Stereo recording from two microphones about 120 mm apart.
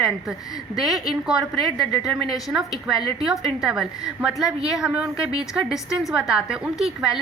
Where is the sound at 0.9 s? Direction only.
5° right (ahead or behind).